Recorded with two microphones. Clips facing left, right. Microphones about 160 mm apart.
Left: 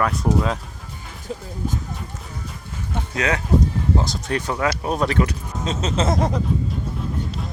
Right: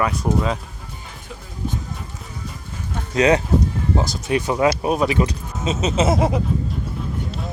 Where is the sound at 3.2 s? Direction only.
20° right (ahead or behind).